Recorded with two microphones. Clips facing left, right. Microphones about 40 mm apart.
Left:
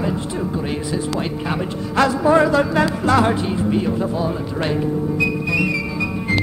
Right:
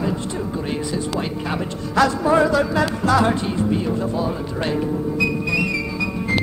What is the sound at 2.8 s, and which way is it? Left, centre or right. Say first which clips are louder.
Music: left 2 dB; left.